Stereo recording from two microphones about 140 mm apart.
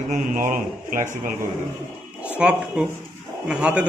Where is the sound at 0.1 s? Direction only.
70° right (ahead or behind).